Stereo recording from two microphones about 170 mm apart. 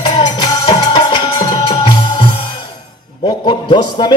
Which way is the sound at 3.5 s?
30° left (ahead or behind).